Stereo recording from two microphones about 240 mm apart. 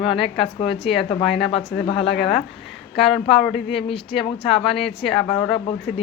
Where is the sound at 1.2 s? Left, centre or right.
Centre.